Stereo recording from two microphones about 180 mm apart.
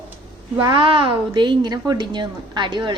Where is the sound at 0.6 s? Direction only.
25° right (ahead or behind).